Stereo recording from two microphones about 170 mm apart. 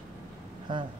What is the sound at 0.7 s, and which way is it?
Speech, 30° right (ahead or behind).